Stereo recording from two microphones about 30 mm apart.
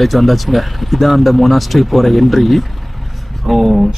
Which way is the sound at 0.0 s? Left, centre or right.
Centre.